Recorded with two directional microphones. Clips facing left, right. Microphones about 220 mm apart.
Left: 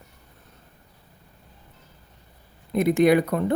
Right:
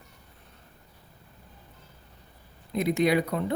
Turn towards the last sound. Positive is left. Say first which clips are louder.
# left 6 dB
turn(degrees=50)  # may be behind; listen again after turning